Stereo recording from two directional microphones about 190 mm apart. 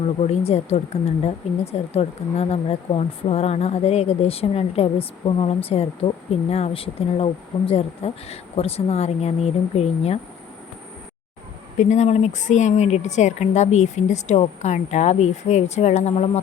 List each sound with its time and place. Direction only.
0.2 s speech: 35° left (ahead or behind)
11.8 s speech: 40° left (ahead or behind)